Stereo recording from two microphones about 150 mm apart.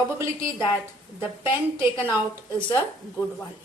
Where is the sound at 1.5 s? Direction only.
15° right (ahead or behind).